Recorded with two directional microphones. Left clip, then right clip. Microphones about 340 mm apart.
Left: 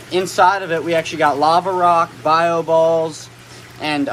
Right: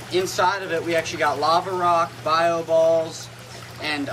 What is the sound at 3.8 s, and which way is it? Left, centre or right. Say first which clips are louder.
Speech: left 6 dB; centre.